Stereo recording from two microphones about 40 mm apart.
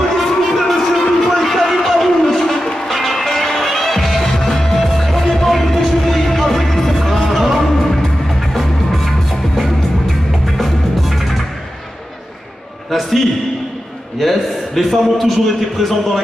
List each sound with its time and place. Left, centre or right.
0.1 s music: centre
12.9 s a sound: centre
14.1 s a man's voice: centre